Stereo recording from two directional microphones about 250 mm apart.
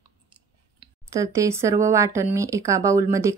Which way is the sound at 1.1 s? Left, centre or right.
Centre.